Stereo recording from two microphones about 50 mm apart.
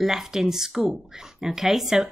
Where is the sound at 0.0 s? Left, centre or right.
Centre.